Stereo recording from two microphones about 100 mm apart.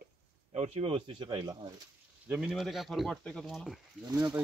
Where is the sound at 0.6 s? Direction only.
70° right (ahead or behind); by 1.5 s 50° right (ahead or behind).